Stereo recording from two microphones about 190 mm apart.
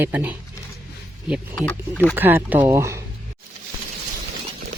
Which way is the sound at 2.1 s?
10° right (ahead or behind).